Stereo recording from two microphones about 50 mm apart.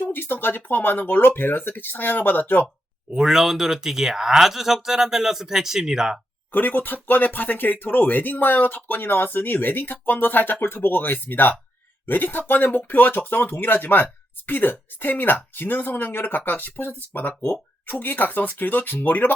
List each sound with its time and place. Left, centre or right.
0.0 s speech: left
3.1 s speech: centre
6.5 s speech: left